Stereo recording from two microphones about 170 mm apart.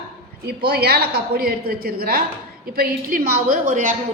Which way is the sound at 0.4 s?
70° right (ahead or behind).